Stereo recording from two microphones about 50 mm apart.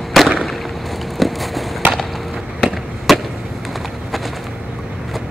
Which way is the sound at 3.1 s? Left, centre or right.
Centre.